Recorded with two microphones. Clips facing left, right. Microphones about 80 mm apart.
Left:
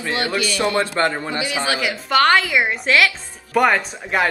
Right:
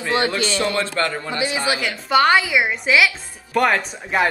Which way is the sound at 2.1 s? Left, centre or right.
Centre.